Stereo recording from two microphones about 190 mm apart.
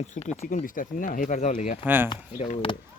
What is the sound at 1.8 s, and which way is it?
Speech, 10° right (ahead or behind).